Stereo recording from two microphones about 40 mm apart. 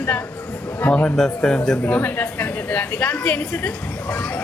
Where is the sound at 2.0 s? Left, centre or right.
Left.